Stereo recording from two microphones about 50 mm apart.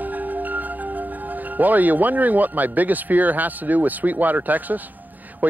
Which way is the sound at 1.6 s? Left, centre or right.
Right.